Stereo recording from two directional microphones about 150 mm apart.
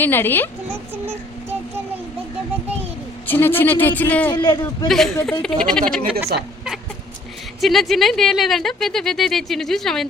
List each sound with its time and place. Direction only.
0.0 s speech: 15° left (ahead or behind)
0.7 s child singing: 15° right (ahead or behind)
3.2 s speech: 15° left (ahead or behind)
4.3 s a man's voice: 30° left (ahead or behind)
4.9 s speech: centre (ahead or behind)
5.9 s a woman's voice: 70° right (ahead or behind)
7.6 s speech: centre (ahead or behind)